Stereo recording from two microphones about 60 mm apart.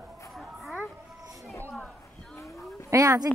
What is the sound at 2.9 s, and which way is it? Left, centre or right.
Dog, right.